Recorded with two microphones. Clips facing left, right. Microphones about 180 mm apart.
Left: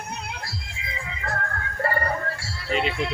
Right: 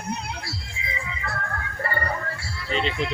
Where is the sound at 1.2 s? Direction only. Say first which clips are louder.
Left 3 dB; 40° left (ahead or behind).